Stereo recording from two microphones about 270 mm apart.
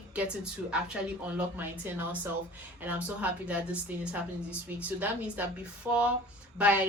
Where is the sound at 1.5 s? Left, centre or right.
Centre.